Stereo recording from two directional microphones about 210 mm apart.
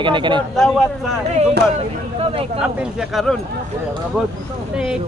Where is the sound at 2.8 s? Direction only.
Centre (ahead or behind).